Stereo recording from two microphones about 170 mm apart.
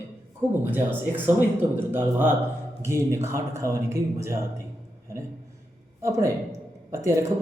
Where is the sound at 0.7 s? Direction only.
10° right (ahead or behind).